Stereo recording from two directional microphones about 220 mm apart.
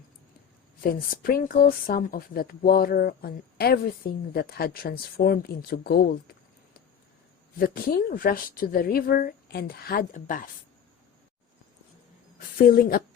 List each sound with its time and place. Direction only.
0.8 s speech: 40° left (ahead or behind)
7.6 s a woman's voice: 45° left (ahead or behind)
12.6 s a woman's voice: 40° left (ahead or behind)